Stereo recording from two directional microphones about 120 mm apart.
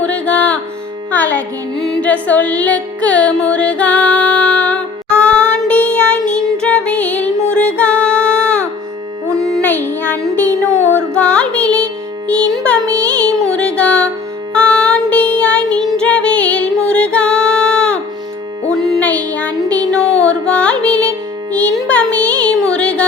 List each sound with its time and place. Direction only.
0.0 s music: 10° left (ahead or behind)